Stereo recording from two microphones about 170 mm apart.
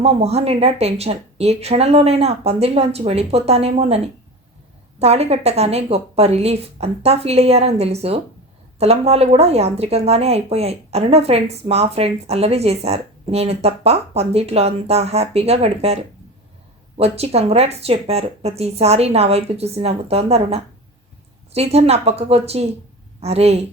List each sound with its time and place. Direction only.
0.0 s speech: 35° right (ahead or behind)
17.0 s speech: 35° right (ahead or behind)